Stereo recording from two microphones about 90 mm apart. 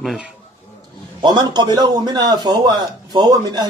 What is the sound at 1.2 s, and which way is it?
A man's voice, 55° right (ahead or behind).